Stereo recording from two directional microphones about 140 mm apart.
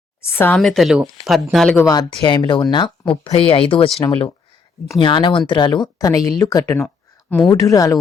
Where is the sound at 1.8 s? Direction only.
30° left (ahead or behind).